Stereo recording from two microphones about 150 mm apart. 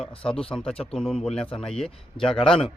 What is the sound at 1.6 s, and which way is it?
A man's voice, 5° left (ahead or behind).